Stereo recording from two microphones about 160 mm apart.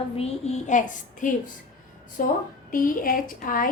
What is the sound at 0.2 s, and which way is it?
A child's voice, 45° left (ahead or behind).